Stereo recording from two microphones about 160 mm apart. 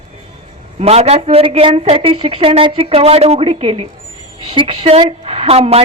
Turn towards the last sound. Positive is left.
turn(degrees=-40)  # may be behind; listen again after turning